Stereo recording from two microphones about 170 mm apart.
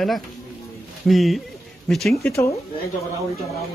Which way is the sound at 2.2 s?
15° left (ahead or behind).